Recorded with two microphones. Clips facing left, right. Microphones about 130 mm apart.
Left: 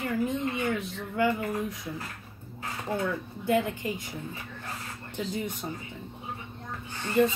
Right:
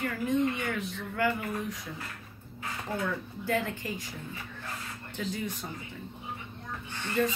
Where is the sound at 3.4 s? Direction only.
20° left (ahead or behind).